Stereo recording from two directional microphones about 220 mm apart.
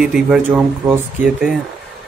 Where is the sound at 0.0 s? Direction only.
5° right (ahead or behind).